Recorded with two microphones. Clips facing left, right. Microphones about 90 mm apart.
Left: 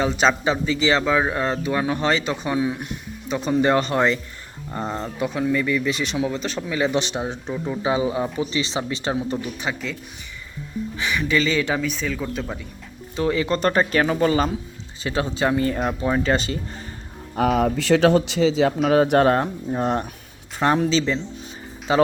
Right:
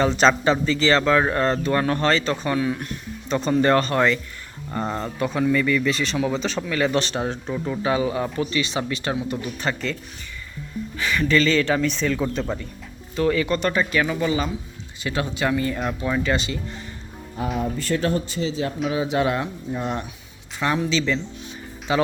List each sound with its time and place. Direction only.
0.0 s speech: 10° left (ahead or behind)
6.2 s speech: 5° left (ahead or behind)
6.7 s speech: 15° left (ahead or behind)
7.8 s speech: 20° left (ahead or behind)
9.6 s speech: 5° left (ahead or behind)
10.9 s speech: 15° left (ahead or behind)
13.1 s speech: 25° left (ahead or behind)
13.6 s speech: 40° left (ahead or behind)
15.0 s speech: 30° left (ahead or behind)
17.3 s speech: 70° left (ahead or behind); by 18.7 s 90° left
18.9 s speech: 60° left (ahead or behind); by 20.9 s 40° left (ahead or behind)
20.9 s speech: 25° left (ahead or behind)